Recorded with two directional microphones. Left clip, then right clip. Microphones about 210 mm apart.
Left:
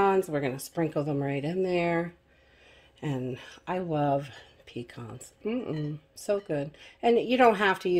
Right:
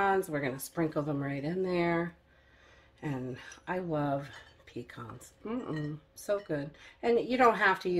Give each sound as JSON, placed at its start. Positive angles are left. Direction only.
{"t": 0.0, "sound": "speech", "side_deg": 35}